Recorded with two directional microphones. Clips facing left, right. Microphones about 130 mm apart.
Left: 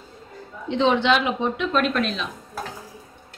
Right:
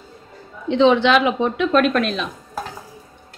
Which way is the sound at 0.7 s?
90° right.